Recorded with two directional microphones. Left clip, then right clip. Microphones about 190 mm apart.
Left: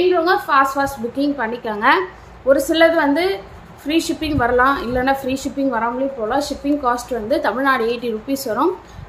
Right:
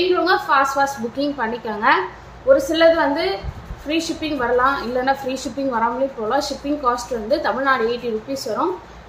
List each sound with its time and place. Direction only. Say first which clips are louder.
0.2 s a woman's voice: left 1 dB; 20° left (ahead or behind)